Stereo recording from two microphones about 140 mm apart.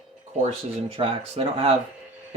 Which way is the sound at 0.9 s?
45° right (ahead or behind).